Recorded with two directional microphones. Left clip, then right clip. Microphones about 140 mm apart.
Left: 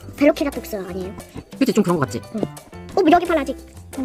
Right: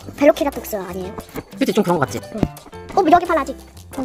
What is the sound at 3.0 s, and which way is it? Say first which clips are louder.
Speech: right 2 dB; 25° left (ahead or behind).